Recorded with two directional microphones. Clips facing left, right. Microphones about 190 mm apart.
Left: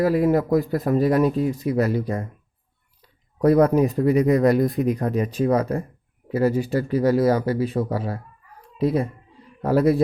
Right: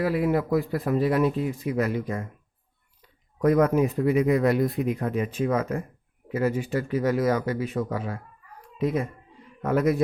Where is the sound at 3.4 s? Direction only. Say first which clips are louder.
Left 4 dB; 35° left (ahead or behind).